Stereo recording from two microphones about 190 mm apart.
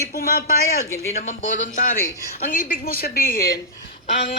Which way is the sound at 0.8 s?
15° left (ahead or behind).